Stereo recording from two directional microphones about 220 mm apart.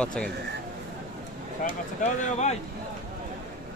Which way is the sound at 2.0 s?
30° left (ahead or behind).